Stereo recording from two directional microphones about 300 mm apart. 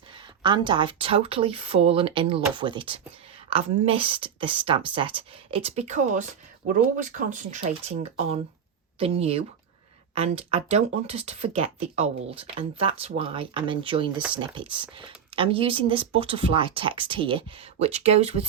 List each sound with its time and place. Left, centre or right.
0.4 s speech: centre